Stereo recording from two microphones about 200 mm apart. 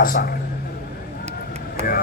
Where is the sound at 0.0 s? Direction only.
45° left (ahead or behind).